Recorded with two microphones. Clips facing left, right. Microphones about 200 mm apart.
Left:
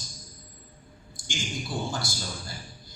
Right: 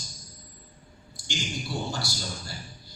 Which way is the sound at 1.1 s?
50° left (ahead or behind).